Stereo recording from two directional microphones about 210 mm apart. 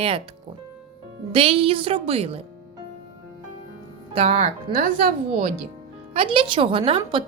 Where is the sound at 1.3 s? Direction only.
25° right (ahead or behind).